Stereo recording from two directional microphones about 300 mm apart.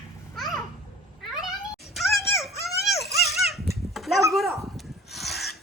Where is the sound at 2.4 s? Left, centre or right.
Centre.